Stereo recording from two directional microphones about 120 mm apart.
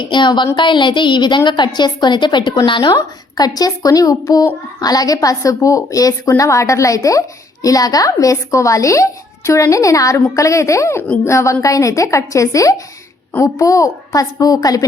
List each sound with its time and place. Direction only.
0.0 s a woman's voice: 40° left (ahead or behind)